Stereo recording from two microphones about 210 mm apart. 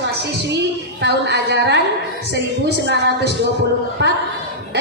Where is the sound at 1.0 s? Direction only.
55° right (ahead or behind).